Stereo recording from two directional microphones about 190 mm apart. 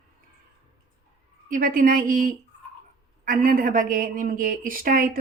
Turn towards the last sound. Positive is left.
turn(degrees=-45)  # may be behind; listen again after turning